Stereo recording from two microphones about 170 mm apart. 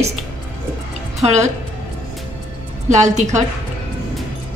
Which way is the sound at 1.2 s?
35° right (ahead or behind).